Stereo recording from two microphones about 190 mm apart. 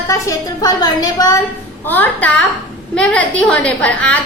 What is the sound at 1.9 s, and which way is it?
A child's voice, 10° left (ahead or behind).